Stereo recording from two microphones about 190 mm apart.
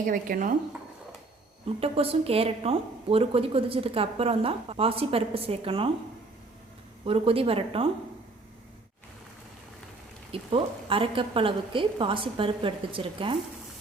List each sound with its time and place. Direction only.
0.0 s speech: 45° right (ahead or behind)
1.8 s a woman's voice: 30° right (ahead or behind)
7.0 s a woman's voice: 30° right (ahead or behind)
10.3 s a woman's voice: 30° right (ahead or behind)